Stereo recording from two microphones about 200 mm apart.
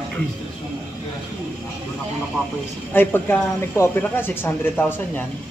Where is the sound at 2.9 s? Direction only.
10° left (ahead or behind).